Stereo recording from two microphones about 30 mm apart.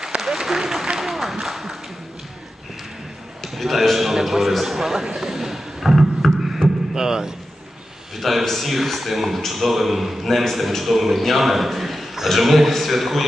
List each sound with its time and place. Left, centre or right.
0.0 s applause: centre
0.9 s a sound: centre
3.4 s a man's voice: centre
5.2 s beatboxing: centre
6.9 s a sound: right
8.2 s a man's voice: centre